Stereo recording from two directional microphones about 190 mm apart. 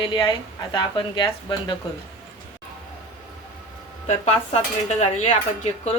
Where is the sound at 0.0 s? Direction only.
25° left (ahead or behind).